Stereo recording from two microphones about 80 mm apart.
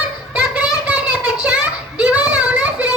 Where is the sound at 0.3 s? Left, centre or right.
Centre.